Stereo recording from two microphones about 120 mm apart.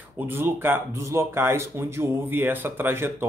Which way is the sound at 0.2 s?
20° right (ahead or behind).